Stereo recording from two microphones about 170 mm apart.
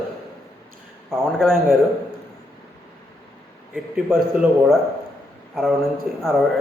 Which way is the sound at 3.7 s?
5° right (ahead or behind).